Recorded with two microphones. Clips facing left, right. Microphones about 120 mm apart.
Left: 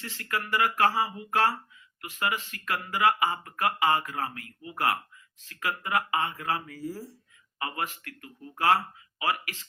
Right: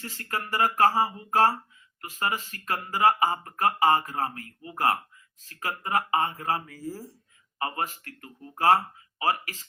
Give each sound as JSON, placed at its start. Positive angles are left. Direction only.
{"t": 0.0, "sound": "speech", "side_deg": -40}